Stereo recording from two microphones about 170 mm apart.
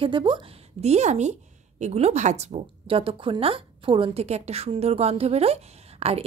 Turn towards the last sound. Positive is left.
turn(degrees=-40)  # may be behind; listen again after turning